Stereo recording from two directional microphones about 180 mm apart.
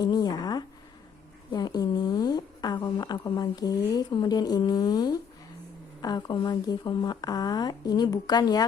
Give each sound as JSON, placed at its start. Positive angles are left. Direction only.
{"t": 0.0, "sound": "a woman's voice", "side_deg": 20}